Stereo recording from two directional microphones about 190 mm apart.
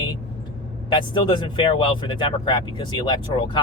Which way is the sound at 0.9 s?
25° left (ahead or behind).